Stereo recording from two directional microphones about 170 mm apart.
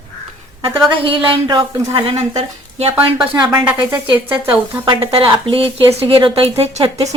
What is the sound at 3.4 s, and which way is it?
Speech, 5° right (ahead or behind).